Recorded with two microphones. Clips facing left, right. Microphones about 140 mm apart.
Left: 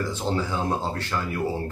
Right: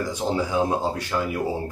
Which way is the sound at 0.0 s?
15° right (ahead or behind).